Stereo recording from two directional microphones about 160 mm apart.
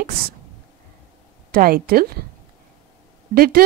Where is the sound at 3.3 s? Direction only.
70° right (ahead or behind).